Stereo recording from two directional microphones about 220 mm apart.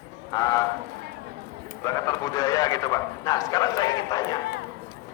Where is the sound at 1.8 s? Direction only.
15° left (ahead or behind).